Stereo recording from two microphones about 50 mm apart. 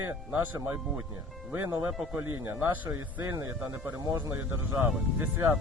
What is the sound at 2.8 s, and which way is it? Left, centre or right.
Speech, right.